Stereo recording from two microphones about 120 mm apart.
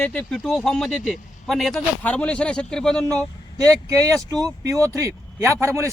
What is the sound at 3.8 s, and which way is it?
A man's voice, 25° right (ahead or behind).